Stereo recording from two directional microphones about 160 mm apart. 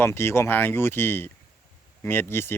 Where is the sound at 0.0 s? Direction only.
15° left (ahead or behind).